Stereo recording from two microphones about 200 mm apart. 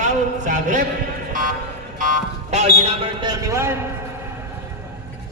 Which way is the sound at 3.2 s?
15° right (ahead or behind).